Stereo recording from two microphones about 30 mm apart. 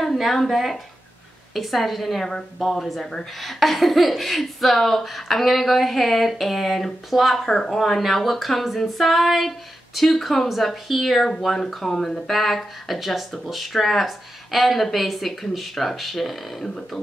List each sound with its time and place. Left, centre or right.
0.0 s speech: centre
3.0 s a woman's voice: left
3.3 s speech: centre
7.4 s speech: centre
12.3 s speech: centre